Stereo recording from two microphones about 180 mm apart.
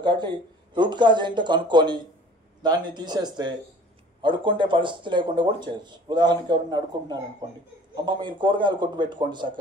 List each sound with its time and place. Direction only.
0.0 s speech: 25° right (ahead or behind)